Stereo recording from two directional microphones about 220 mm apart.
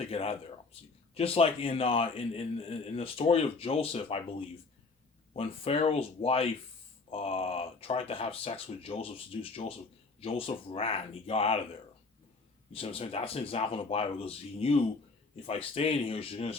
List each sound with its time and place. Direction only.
0.0 s speech: 25° left (ahead or behind)
12.7 s speech: 25° left (ahead or behind)